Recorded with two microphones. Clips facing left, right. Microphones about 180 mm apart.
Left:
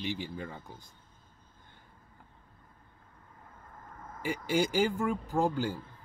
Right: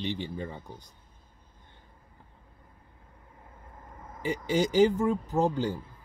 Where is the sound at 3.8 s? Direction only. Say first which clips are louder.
Even; 15° right (ahead or behind).